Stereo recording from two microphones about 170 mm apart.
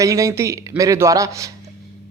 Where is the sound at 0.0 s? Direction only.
20° right (ahead or behind).